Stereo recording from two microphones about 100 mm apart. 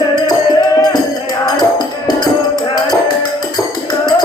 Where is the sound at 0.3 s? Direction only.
45° left (ahead or behind).